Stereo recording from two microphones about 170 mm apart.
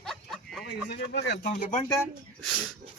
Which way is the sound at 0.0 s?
Centre (ahead or behind).